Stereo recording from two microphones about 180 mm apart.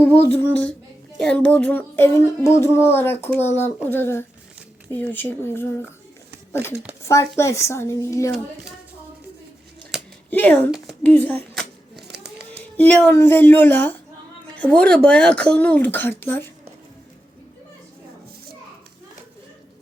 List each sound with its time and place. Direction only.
0.0 s speech: 10° left (ahead or behind)
10.2 s a woman's voice: 10° left (ahead or behind)
11.1 s a sound: 10° left (ahead or behind)
12.7 s speech: 10° left (ahead or behind)